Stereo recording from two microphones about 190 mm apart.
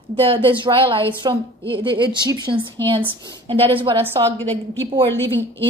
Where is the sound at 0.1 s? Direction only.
30° right (ahead or behind).